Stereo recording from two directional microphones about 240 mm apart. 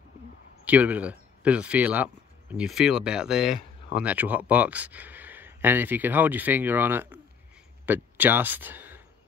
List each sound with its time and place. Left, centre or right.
0.7 s speech: centre